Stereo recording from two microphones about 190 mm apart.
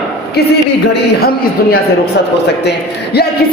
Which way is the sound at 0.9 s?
55° left (ahead or behind).